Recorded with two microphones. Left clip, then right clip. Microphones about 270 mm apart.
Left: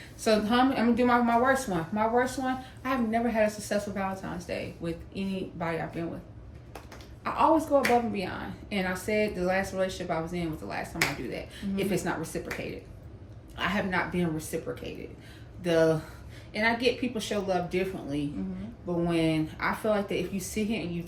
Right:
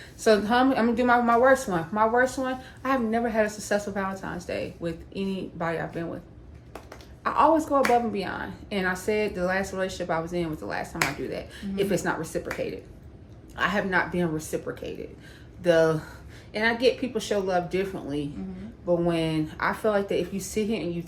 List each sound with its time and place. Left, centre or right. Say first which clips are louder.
0.2 s a woman's voice: right 4 dB; centre
7.3 s a woman's voice: right 3 dB; centre